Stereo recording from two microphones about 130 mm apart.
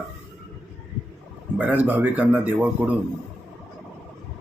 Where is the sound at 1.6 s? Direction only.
10° right (ahead or behind).